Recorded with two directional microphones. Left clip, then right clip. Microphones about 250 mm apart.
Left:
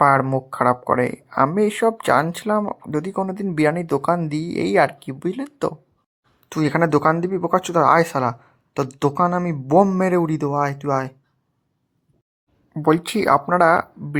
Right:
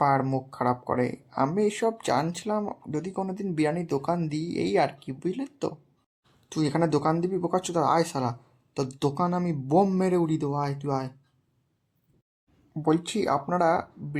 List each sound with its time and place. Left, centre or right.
0.0 s speech: centre
12.7 s speech: centre